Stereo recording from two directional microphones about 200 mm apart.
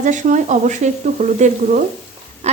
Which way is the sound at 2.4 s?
35° right (ahead or behind).